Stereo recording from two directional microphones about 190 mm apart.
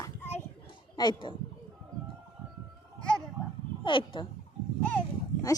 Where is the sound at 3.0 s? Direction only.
5° left (ahead or behind).